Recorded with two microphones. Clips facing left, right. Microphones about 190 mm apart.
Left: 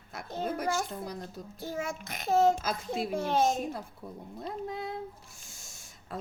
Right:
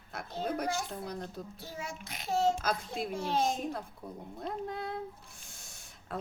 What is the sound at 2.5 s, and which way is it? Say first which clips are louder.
Speech: left 1 dB; 5° left (ahead or behind).